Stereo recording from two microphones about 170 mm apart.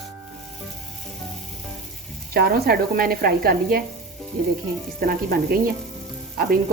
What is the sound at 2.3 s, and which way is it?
Speech, 65° right (ahead or behind).